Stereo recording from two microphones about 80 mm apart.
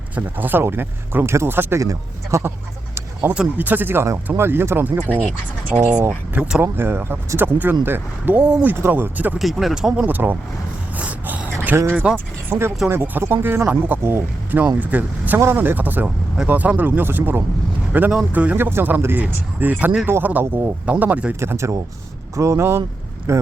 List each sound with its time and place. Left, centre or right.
0.2 s speech: right
1.8 s speech: right
3.2 s speech: right
6.7 s speech: right
9.4 s speech: centre
10.0 s speech: right
10.9 s a sound: centre
11.9 s speech: right
14.0 s speech: right
14.8 s speech: centre
21.3 s speech: right